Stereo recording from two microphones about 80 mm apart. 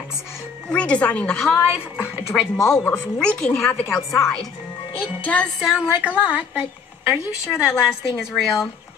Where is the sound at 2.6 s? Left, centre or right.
Centre.